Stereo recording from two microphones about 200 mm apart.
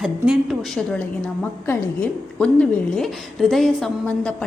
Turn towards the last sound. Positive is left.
turn(degrees=5)  # may be behind; listen again after turning